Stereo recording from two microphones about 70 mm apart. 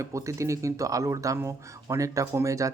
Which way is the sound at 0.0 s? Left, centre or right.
Right.